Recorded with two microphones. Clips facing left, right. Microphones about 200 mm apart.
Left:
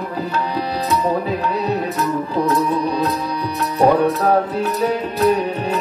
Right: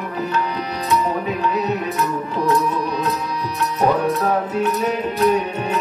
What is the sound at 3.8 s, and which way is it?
Music, 30° left (ahead or behind).